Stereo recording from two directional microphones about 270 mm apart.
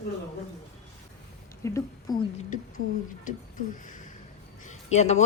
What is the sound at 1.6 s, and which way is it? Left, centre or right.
Speech, centre.